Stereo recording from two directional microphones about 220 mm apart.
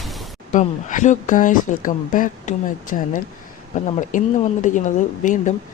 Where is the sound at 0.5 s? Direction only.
35° left (ahead or behind).